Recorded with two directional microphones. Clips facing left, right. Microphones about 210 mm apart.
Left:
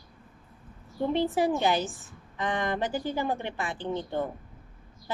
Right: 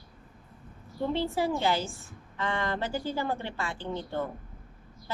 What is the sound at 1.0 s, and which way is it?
A woman's voice, 20° left (ahead or behind).